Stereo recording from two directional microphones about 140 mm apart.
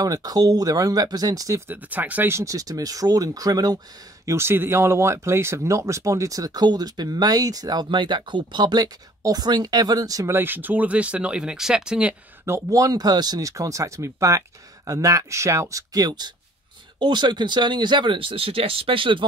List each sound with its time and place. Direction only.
0.0 s speech: 25° right (ahead or behind)
1.7 s speech: 10° right (ahead or behind)
12.4 s speech: 20° right (ahead or behind); by 19.2 s 40° right (ahead or behind)